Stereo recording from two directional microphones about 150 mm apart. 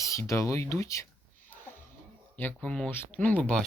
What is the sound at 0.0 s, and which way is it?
Speech, 20° left (ahead or behind).